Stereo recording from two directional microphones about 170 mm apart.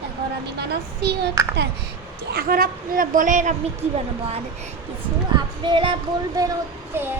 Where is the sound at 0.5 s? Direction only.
70° right (ahead or behind).